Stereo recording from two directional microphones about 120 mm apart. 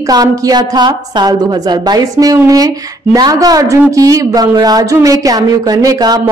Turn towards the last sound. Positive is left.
turn(degrees=-35)  # may be behind; listen again after turning